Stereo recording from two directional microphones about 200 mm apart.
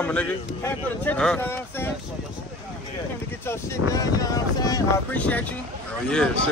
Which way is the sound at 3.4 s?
15° left (ahead or behind).